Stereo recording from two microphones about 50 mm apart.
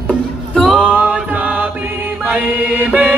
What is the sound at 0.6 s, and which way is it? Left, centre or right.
Music, centre.